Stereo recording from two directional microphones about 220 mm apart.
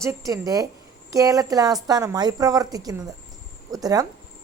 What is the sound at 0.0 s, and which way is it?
A woman's voice, 15° right (ahead or behind).